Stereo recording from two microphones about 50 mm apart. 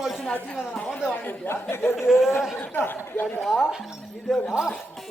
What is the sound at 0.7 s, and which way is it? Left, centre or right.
Speech, left.